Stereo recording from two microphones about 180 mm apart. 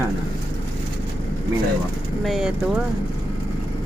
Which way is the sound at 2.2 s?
Centre (ahead or behind).